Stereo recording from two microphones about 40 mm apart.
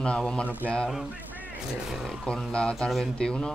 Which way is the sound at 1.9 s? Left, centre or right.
Centre.